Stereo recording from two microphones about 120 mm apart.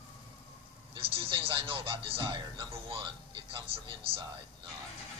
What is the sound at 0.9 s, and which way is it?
Speech, 50° right (ahead or behind).